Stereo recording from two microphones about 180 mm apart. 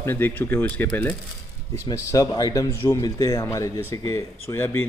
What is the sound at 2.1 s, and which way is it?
Speech, 20° left (ahead or behind).